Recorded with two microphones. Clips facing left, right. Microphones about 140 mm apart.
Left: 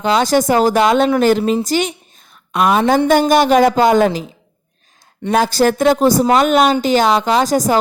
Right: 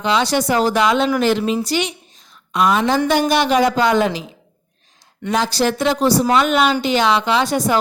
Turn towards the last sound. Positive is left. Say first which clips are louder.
# left 3 dB
turn(degrees=40)  # may be behind; listen again after turning